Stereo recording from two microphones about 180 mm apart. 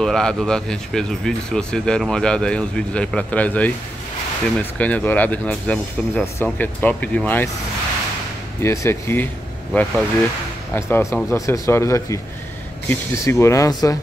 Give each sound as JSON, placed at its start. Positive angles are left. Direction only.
{"t": 0.0, "sound": "speech", "side_deg": 5}
{"t": 8.6, "sound": "speech", "side_deg": 15}
{"t": 9.7, "sound": "speech", "side_deg": 0}
{"t": 10.7, "sound": "speech", "side_deg": 15}